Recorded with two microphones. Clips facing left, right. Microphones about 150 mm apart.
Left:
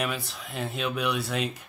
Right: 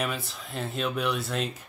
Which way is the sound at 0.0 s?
Centre (ahead or behind).